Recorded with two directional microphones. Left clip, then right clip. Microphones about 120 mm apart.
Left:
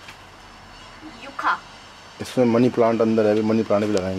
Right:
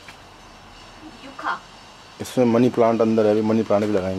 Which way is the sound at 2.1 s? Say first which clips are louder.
Even; 10° right (ahead or behind).